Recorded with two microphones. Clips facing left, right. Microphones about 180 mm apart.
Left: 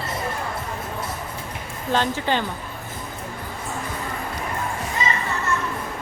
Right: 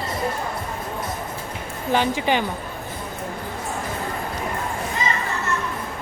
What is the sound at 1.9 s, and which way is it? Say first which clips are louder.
Speech: right 2 dB; 15° right (ahead or behind).